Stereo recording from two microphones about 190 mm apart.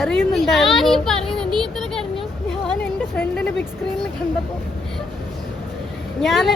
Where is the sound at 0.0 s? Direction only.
Centre (ahead or behind).